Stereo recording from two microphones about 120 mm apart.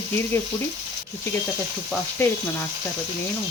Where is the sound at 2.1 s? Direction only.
20° left (ahead or behind).